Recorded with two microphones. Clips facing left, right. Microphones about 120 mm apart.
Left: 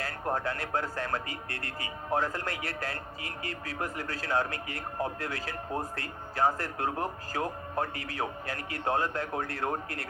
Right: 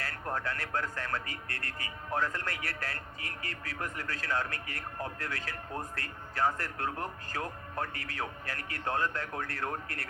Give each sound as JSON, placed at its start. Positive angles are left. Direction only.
{"t": 0.0, "sound": "a man's voice", "side_deg": 25}